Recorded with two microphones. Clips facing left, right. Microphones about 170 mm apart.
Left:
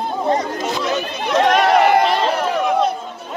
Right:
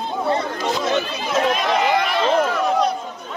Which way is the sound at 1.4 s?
70° left (ahead or behind).